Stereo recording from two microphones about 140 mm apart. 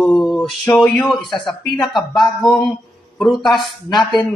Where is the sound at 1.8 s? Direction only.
Centre (ahead or behind).